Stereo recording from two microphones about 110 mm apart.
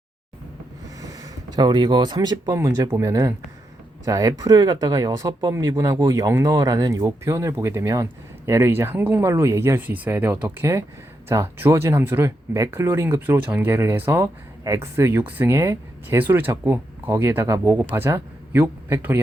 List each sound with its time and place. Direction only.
0.9 s speech: 35° right (ahead or behind)